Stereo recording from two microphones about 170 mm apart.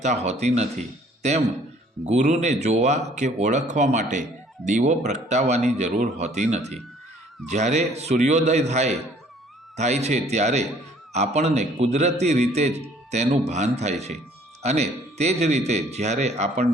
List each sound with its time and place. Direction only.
0.0 s a man's voice: 40° right (ahead or behind)